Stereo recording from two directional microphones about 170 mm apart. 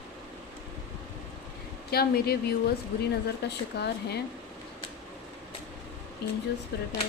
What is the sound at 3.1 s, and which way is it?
Speech, 75° left (ahead or behind).